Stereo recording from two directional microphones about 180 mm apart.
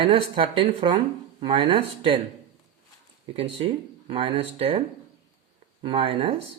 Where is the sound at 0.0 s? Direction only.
30° right (ahead or behind).